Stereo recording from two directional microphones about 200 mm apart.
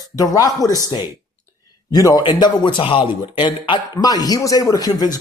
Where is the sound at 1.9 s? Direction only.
20° left (ahead or behind).